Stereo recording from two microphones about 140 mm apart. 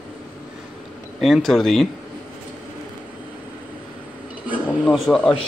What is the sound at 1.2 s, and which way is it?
Speech, centre (ahead or behind).